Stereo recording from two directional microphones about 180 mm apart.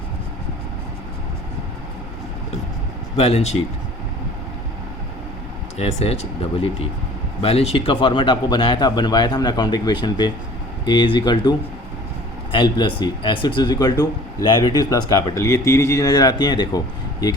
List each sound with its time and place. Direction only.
3.2 s speech: 35° left (ahead or behind)
5.7 s speech: 35° left (ahead or behind); by 17.3 s 20° left (ahead or behind)